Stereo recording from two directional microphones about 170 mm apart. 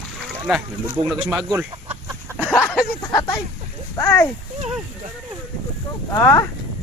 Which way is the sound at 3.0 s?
25° left (ahead or behind).